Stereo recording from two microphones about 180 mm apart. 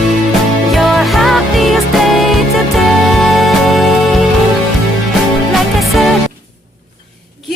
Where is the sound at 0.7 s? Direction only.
Centre (ahead or behind).